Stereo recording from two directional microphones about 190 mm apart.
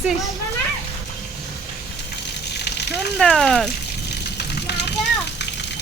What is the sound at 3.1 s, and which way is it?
Speech, 5° left (ahead or behind).